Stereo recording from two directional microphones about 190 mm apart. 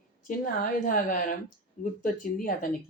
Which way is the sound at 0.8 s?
45° left (ahead or behind).